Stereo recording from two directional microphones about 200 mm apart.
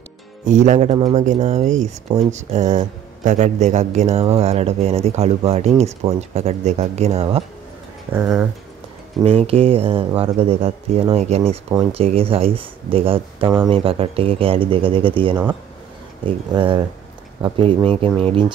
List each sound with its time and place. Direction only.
0.5 s speech: 35° right (ahead or behind)
8.1 s speech: 10° right (ahead or behind)
9.2 s speech: 30° right (ahead or behind)